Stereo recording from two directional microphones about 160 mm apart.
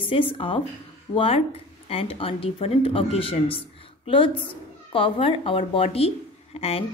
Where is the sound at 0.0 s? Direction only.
30° left (ahead or behind).